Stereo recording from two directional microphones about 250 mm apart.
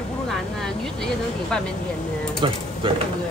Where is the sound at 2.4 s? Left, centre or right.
Centre.